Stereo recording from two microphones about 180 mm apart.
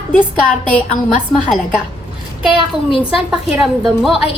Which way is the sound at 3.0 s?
5° right (ahead or behind).